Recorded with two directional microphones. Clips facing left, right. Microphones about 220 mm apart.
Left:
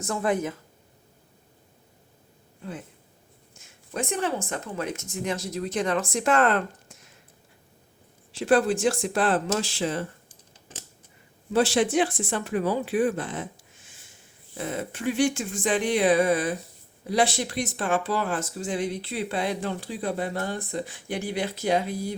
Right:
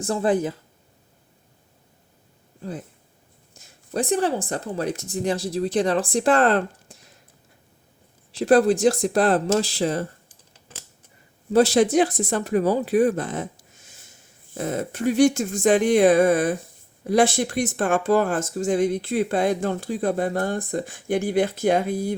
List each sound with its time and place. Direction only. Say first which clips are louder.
0.0 s speech: right 4 dB; 30° right (ahead or behind)
2.6 s speech: right 4 dB; 35° right (ahead or behind)
8.3 s speech: right 5 dB; 40° right (ahead or behind)
11.5 s speech: right 5 dB; 40° right (ahead or behind)